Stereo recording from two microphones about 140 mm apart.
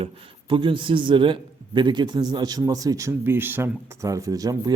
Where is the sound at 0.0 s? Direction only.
35° right (ahead or behind).